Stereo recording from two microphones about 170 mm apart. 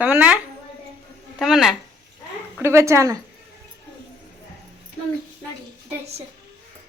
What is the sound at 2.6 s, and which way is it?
Speech, 15° right (ahead or behind).